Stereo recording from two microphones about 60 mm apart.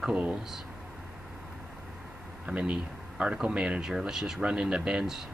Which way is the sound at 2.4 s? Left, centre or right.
Centre.